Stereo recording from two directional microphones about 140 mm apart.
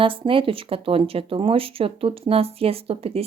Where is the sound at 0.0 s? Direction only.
40° right (ahead or behind).